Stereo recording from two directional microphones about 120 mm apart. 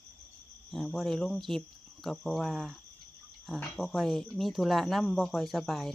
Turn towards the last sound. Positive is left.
turn(degrees=0)  # may be behind; listen again after turning